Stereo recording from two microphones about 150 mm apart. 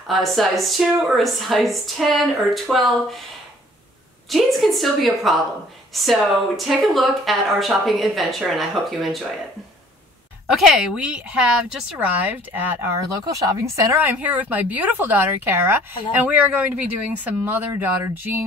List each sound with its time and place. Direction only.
0.1 s speech: centre (ahead or behind)
4.3 s speech: centre (ahead or behind)
10.5 s speech: 5° right (ahead or behind)
13.2 s speech: 20° right (ahead or behind)
13.9 s speech: 10° right (ahead or behind)